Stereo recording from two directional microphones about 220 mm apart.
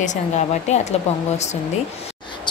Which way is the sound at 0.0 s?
30° left (ahead or behind).